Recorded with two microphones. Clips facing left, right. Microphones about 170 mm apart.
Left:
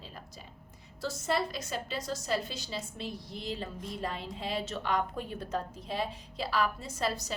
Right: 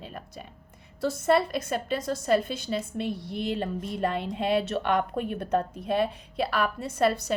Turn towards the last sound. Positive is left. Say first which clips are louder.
# right 9 dB
turn(degrees=-60)  # may be behind; listen again after turning